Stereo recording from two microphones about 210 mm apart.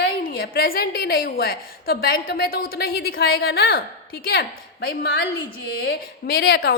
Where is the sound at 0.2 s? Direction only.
45° left (ahead or behind).